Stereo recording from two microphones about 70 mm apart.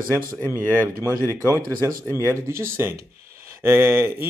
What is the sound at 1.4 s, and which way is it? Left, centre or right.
Speech, right.